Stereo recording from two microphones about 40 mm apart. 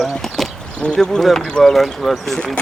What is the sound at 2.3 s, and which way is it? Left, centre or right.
Speech, left.